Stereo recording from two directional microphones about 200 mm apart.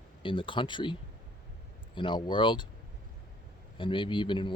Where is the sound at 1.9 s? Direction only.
25° left (ahead or behind).